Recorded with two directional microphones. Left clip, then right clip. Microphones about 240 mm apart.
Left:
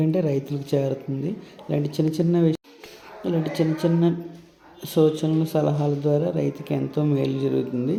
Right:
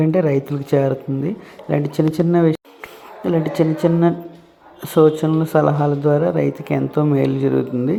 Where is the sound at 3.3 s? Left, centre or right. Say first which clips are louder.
Right 6 dB; right.